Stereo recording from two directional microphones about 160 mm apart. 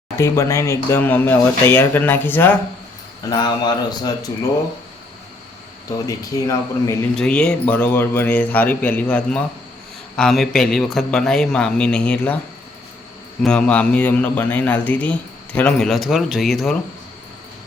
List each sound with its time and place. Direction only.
0.2 s a man's voice: 20° left (ahead or behind)
3.2 s a man's voice: 25° left (ahead or behind)
6.1 s a man's voice: 20° left (ahead or behind)
7.2 s a man's voice: 5° left (ahead or behind)
13.4 s a man's voice: 5° left (ahead or behind)